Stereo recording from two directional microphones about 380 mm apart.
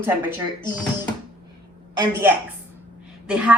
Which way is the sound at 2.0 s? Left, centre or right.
Centre.